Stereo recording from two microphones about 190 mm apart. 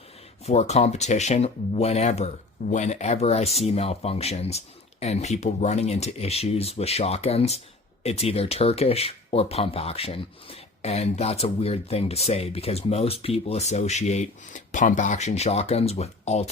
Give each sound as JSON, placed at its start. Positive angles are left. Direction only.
{"t": 0.4, "sound": "speech", "side_deg": 35}